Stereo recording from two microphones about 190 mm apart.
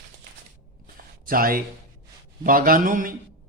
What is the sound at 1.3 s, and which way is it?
Speech, 50° right (ahead or behind).